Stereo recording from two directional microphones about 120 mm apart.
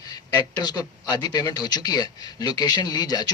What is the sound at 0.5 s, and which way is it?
Speech, 35° left (ahead or behind).